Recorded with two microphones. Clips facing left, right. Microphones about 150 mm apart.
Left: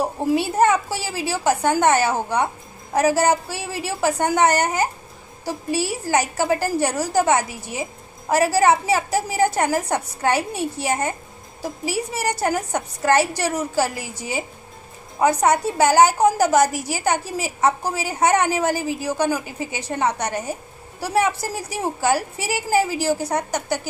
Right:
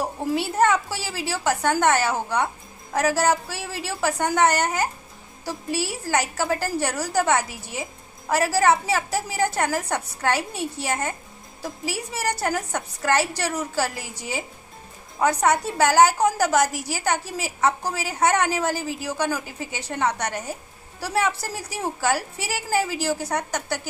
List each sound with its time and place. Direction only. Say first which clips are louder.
0.3 s a woman's voice: left 3 dB; 10° left (ahead or behind)
6.0 s a woman's voice: left 3 dB; 15° left (ahead or behind)